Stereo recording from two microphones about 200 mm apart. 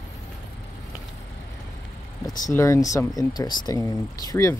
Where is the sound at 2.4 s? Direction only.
15° left (ahead or behind).